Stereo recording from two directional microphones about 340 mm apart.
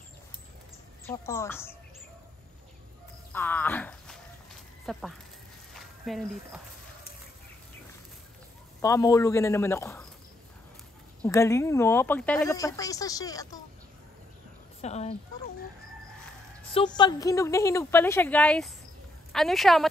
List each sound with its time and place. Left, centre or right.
1.0 s a woman's voice: centre
3.3 s a woman's voice: centre
5.7 s a sound: centre
8.8 s speech: centre
11.2 s speech: centre
14.8 s speech: centre
16.7 s a woman's voice: centre